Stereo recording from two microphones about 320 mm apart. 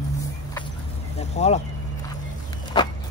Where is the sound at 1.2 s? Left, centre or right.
Centre.